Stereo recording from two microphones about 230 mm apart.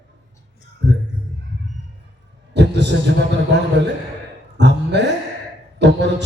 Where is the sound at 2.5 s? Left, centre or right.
Right.